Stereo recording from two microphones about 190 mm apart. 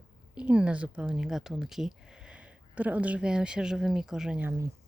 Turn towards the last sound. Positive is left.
turn(degrees=-10)  # may be behind; listen again after turning